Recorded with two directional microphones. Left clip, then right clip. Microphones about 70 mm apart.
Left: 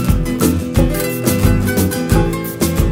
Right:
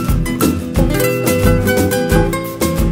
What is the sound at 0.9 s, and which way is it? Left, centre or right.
Music, right.